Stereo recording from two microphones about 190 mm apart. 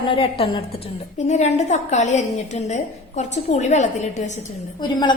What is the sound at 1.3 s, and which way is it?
A woman's voice, 40° left (ahead or behind).